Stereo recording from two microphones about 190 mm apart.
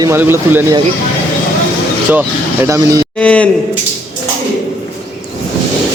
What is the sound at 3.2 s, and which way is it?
Speech, 5° left (ahead or behind).